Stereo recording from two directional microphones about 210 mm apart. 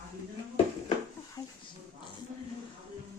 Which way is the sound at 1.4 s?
15° left (ahead or behind).